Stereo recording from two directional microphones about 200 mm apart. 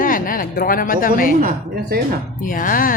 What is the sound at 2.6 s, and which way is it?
Speech, 45° left (ahead or behind).